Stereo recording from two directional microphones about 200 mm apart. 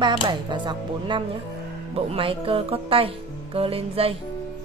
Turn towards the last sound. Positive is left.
turn(degrees=-30)  # may be behind; listen again after turning